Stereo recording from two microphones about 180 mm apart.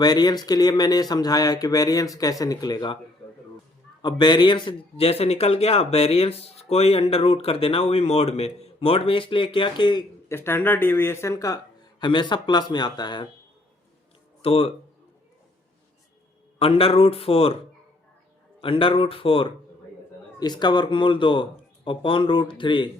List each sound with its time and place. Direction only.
0.0 s speech: 20° left (ahead or behind)
4.0 s speech: 25° left (ahead or behind)
14.4 s speech: 30° left (ahead or behind)
16.6 s speech: 30° left (ahead or behind)
18.6 s speech: 30° left (ahead or behind)